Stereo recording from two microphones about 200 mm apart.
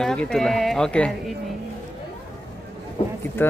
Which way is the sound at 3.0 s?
30° left (ahead or behind).